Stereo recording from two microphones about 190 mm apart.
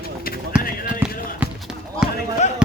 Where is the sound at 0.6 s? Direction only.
50° left (ahead or behind).